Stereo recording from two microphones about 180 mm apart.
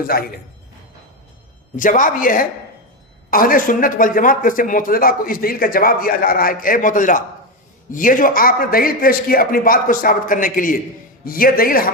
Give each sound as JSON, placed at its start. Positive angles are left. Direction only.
{"t": 0.1, "sound": "a man's voice", "side_deg": 55}
{"t": 1.7, "sound": "a man's voice", "side_deg": 45}